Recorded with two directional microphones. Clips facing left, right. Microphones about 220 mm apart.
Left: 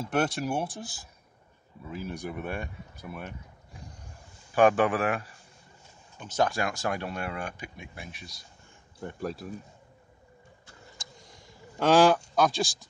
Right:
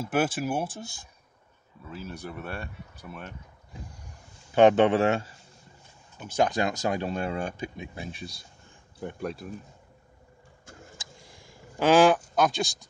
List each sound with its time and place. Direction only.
0.0 s speech: 5° right (ahead or behind)
1.9 s speech: 15° left (ahead or behind)
4.6 s speech: 25° right (ahead or behind)
6.1 s speech: 10° right (ahead or behind); by 8.4 s 30° right (ahead or behind)
9.0 s speech: centre (ahead or behind)
10.7 s vehicle: 50° right (ahead or behind)
11.8 s goose: centre (ahead or behind)
12.4 s speech: centre (ahead or behind)